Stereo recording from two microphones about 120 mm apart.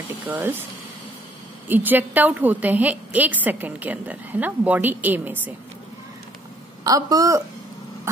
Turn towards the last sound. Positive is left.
turn(degrees=-30)  # may be behind; listen again after turning